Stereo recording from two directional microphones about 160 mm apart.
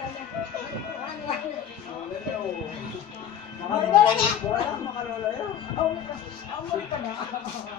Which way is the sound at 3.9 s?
30° left (ahead or behind).